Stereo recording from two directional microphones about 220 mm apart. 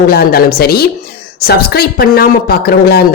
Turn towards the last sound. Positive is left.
turn(degrees=45)  # may be behind; listen again after turning